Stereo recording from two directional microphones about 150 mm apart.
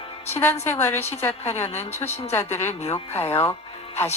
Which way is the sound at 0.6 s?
15° left (ahead or behind).